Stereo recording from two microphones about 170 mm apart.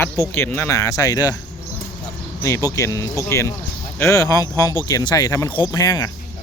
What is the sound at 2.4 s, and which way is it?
Speech, 20° left (ahead or behind).